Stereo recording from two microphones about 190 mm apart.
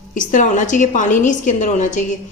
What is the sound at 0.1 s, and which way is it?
A woman's voice, 45° left (ahead or behind).